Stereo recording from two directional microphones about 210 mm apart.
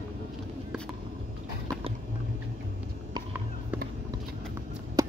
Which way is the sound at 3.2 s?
10° right (ahead or behind).